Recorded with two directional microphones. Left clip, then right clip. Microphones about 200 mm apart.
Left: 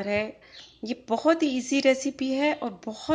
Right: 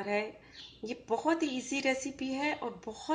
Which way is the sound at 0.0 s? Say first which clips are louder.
Left 6 dB; 40° left (ahead or behind).